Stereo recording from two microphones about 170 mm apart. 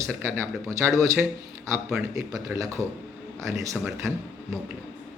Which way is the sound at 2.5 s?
15° right (ahead or behind).